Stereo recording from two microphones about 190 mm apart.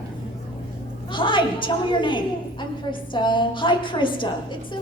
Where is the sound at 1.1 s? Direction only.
25° left (ahead or behind).